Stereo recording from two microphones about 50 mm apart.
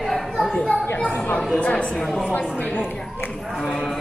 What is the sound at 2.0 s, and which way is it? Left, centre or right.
Speech, centre.